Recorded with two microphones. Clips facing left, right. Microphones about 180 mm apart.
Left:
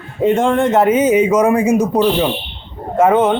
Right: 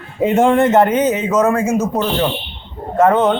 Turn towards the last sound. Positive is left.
turn(degrees=10)  # may be behind; listen again after turning